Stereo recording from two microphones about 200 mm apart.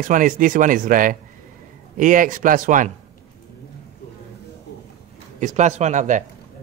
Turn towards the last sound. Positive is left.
turn(degrees=-40)  # may be behind; listen again after turning